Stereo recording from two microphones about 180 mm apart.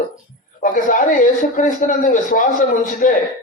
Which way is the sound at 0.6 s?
45° left (ahead or behind).